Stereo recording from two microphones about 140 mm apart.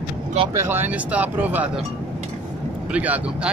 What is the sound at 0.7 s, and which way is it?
Speech, 15° right (ahead or behind).